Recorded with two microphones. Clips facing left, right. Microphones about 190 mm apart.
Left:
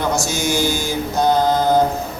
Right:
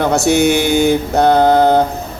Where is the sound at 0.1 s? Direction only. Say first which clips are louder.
Right 8 dB; 65° right (ahead or behind).